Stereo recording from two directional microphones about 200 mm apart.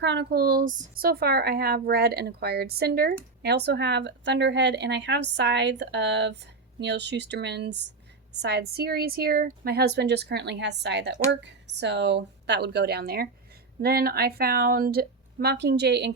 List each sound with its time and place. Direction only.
0.0 s speech: 60° right (ahead or behind)